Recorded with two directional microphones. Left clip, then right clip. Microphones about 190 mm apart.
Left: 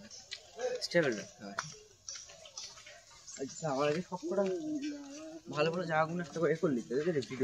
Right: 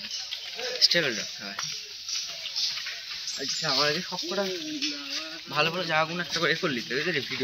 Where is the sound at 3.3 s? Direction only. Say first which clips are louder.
Right 8 dB; 10° right (ahead or behind).